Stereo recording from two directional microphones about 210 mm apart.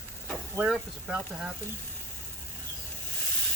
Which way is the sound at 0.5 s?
5° right (ahead or behind).